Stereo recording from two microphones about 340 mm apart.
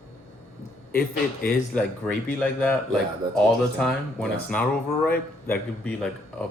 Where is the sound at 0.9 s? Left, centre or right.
Left.